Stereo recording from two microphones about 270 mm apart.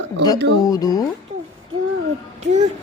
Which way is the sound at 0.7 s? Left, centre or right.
Centre.